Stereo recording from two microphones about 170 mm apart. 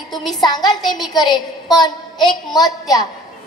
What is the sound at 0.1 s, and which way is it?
Speech, centre (ahead or behind).